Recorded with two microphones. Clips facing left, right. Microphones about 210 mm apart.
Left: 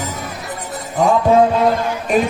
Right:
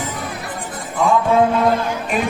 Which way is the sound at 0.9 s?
40° left (ahead or behind).